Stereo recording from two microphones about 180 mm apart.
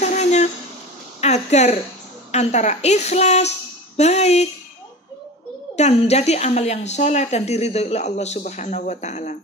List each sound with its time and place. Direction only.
0.0 s a sound: 40° left (ahead or behind)
2.3 s a woman's voice: 40° left (ahead or behind)
5.8 s a woman's voice: 35° left (ahead or behind)